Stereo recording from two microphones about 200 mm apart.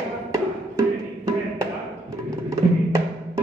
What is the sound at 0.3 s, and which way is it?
Music, 15° right (ahead or behind).